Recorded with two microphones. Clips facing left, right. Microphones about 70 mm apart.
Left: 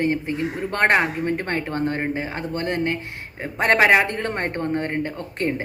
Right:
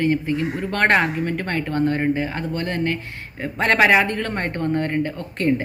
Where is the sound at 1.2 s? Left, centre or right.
Left.